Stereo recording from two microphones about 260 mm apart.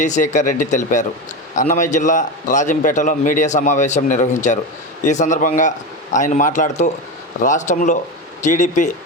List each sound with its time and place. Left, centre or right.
0.0 s a man's voice: left